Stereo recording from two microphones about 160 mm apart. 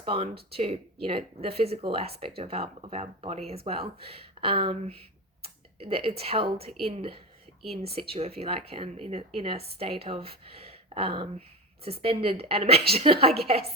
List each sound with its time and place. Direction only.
0.0 s speech: 35° right (ahead or behind)